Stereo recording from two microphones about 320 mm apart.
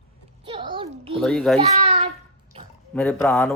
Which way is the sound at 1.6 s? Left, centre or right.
Centre.